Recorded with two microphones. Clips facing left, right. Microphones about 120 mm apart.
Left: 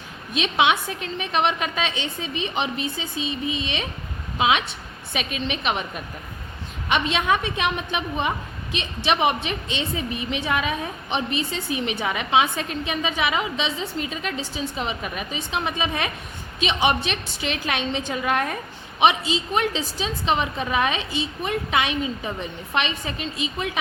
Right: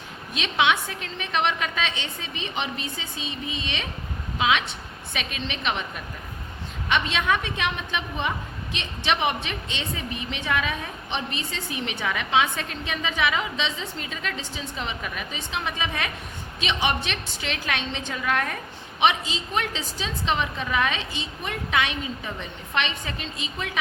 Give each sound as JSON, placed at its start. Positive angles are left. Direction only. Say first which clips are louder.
{"t": 0.3, "sound": "a woman's voice", "louder": "left 2 dB", "side_deg": 20}
{"t": 6.8, "sound": "a woman's voice", "louder": "left 2 dB", "side_deg": 20}